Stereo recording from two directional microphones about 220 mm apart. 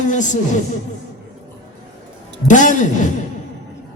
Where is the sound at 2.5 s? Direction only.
35° left (ahead or behind).